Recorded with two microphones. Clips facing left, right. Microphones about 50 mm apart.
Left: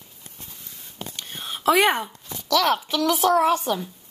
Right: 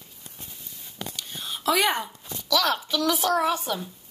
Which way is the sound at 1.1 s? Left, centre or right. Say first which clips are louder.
Left 4 dB; left.